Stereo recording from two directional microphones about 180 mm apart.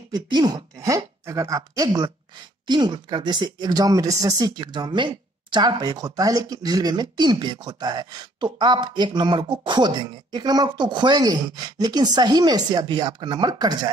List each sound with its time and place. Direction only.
0.1 s speech: 25° right (ahead or behind)